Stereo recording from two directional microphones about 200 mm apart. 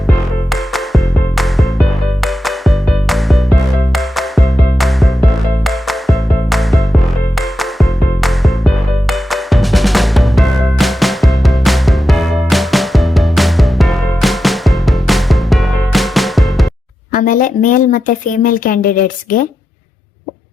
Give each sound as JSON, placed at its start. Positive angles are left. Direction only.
{"t": 0.5, "sound": "music", "side_deg": 0}
{"t": 17.1, "sound": "speech", "side_deg": 40}